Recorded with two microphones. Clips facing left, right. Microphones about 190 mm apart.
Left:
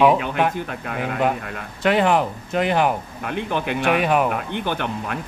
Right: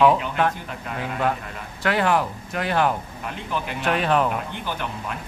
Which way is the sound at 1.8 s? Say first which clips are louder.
Left 3 dB; 20° left (ahead or behind).